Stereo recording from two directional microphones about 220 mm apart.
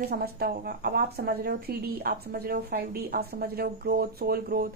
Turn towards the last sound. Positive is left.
turn(degrees=-40)  # may be behind; listen again after turning